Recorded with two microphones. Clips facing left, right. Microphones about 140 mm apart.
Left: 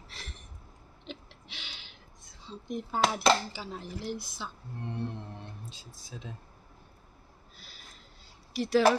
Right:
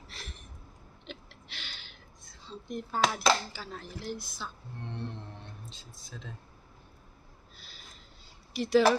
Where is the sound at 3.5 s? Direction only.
20° left (ahead or behind).